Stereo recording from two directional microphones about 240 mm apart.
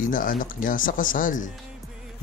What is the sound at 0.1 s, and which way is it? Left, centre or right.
A man's voice, left.